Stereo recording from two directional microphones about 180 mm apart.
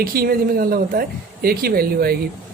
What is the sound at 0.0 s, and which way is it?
A woman's voice, 55° right (ahead or behind).